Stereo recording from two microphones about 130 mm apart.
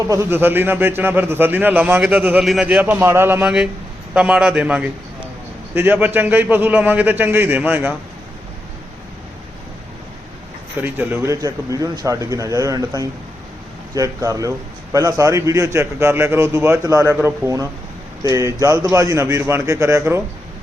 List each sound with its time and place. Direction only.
0.1 s a man's voice: 20° right (ahead or behind); by 2.8 s 5° right (ahead or behind)
2.8 s a man's voice: 15° right (ahead or behind)
4.1 s a man's voice: 5° right (ahead or behind)
10.8 s speech: 15° right (ahead or behind)